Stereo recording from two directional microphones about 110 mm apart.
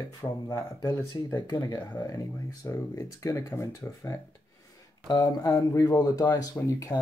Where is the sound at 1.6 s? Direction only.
40° left (ahead or behind).